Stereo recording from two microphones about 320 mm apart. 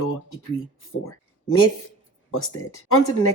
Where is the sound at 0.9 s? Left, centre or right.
Left.